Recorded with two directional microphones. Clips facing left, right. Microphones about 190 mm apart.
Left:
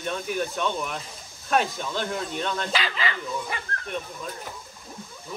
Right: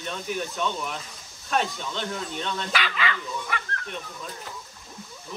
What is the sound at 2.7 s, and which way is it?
Speech, 30° left (ahead or behind).